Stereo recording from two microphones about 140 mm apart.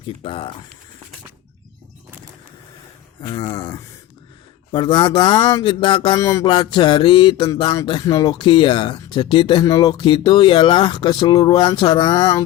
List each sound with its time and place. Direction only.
0.2 s speech: 40° left (ahead or behind)
3.2 s speech: 30° left (ahead or behind)
6.4 s speech: 35° left (ahead or behind)